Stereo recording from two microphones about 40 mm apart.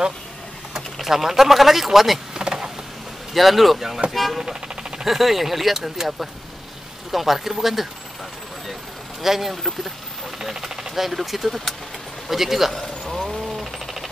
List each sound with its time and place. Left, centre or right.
0.9 s speech: centre
2.3 s insect: centre
3.3 s speech: centre
4.4 s vehicle: centre
5.0 s speech: centre
9.2 s speech: centre
13.1 s a sound: centre